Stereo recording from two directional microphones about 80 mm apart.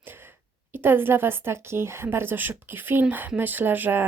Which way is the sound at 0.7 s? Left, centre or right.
Right.